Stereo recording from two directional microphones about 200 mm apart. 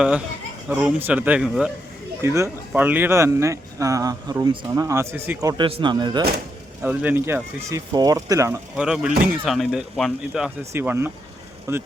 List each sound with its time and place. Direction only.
0.7 s speech: 10° right (ahead or behind)
2.2 s speech: 15° right (ahead or behind)
6.8 s speech: 10° right (ahead or behind)
8.7 s speech: 5° right (ahead or behind)